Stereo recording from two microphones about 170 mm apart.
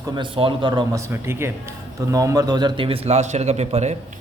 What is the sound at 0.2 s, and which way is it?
A man's voice, 30° right (ahead or behind).